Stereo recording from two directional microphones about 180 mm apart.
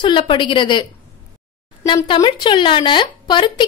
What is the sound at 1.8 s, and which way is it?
A woman's voice, 25° left (ahead or behind).